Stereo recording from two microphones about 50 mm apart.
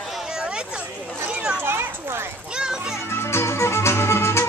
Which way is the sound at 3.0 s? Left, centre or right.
Left.